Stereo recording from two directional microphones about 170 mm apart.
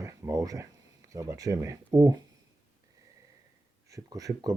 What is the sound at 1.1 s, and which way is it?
Speech, 20° right (ahead or behind).